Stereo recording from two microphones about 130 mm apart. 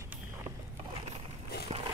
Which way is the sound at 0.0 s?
20° right (ahead or behind).